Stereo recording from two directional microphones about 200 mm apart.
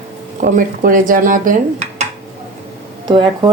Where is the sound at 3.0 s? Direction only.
25° right (ahead or behind).